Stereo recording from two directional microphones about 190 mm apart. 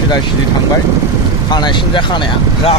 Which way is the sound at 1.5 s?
25° left (ahead or behind).